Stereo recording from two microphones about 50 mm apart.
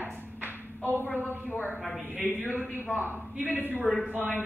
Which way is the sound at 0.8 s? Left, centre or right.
Left.